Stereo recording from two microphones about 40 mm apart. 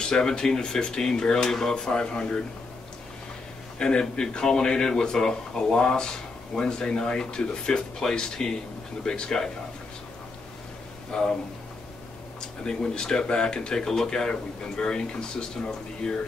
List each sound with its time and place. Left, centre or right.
0.0 s speech: centre
3.7 s speech: centre
11.1 s speech: centre
12.4 s speech: centre